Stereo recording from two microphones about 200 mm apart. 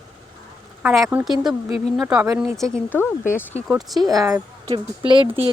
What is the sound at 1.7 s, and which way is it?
Speech, 30° left (ahead or behind).